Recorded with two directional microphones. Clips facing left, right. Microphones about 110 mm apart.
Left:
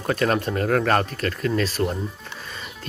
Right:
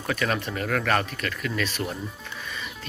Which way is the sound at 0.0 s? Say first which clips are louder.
Left 5 dB; 40° left (ahead or behind).